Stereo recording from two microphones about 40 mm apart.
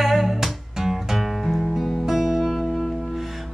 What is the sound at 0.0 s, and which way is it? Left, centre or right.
Music, centre.